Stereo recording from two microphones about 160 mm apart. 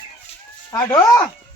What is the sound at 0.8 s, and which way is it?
Speech, 20° left (ahead or behind).